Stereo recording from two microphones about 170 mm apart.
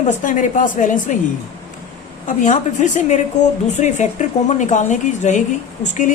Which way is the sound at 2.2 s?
45° left (ahead or behind).